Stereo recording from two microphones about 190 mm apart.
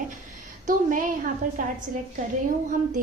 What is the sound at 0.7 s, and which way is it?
Speech, 45° right (ahead or behind).